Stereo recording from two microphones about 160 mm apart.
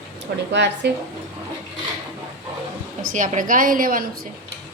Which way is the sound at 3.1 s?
55° right (ahead or behind).